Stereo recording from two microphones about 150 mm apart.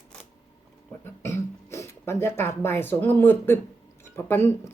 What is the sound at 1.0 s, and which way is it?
A woman's voice, 20° left (ahead or behind).